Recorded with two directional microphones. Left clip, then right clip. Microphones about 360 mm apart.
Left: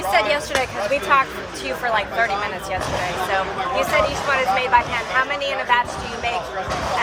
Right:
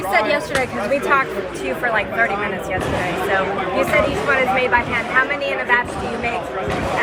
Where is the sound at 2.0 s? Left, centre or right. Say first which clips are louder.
Right 2 dB; left.